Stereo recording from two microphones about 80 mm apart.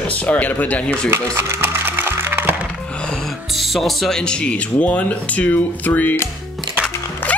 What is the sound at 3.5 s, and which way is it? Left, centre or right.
Speech, centre.